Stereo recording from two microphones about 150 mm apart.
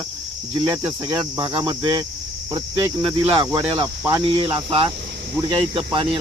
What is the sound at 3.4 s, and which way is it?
Cricket, 30° right (ahead or behind).